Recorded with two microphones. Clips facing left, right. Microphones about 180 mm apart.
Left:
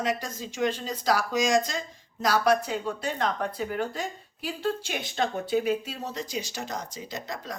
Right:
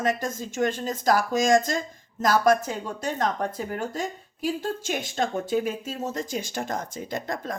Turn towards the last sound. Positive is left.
turn(degrees=-50)  # may be behind; listen again after turning